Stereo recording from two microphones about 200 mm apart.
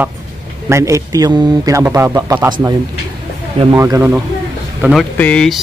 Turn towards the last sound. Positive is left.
turn(degrees=5)  # may be behind; listen again after turning